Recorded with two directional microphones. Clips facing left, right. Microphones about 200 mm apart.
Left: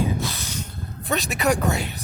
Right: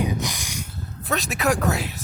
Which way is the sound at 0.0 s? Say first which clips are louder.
Left 1 dB; 15° right (ahead or behind).